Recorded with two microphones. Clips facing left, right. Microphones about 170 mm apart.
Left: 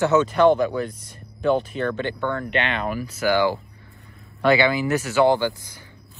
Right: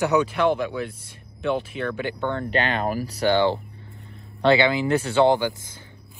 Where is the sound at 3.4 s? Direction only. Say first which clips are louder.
Even; 25° right (ahead or behind).